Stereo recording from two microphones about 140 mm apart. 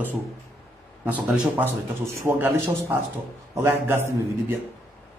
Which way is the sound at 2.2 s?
15° right (ahead or behind).